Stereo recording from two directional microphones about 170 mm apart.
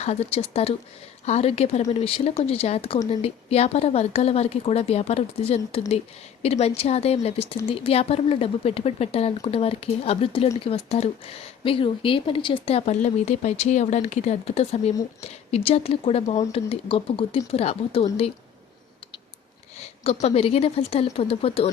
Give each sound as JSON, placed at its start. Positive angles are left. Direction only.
{"t": 0.0, "sound": "speech", "side_deg": 35}
{"t": 20.2, "sound": "speech", "side_deg": 35}